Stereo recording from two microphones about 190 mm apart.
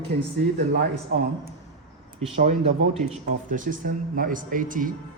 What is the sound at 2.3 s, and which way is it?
Speech, 35° right (ahead or behind).